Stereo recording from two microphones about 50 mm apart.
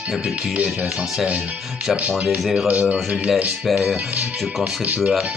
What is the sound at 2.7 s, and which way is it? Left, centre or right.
Speech, right.